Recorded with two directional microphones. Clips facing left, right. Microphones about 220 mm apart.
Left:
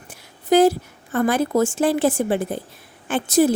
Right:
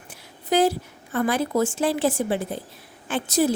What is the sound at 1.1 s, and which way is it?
A woman's voice, 50° left (ahead or behind).